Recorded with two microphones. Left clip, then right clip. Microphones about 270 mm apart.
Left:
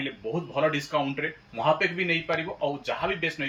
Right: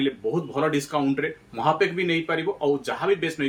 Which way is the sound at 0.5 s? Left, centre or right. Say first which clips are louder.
Left 1 dB; centre.